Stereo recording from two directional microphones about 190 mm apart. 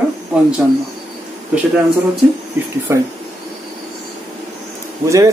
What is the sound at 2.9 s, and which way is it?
Speech, 15° right (ahead or behind).